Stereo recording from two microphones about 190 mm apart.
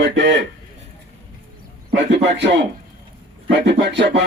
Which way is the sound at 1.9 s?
65° right (ahead or behind).